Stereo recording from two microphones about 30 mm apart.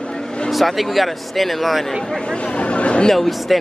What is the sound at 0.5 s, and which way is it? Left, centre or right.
Speech, centre.